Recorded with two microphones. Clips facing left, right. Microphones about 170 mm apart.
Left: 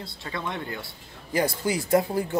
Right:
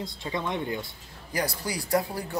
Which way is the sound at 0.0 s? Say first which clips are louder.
Right 2 dB; 15° right (ahead or behind).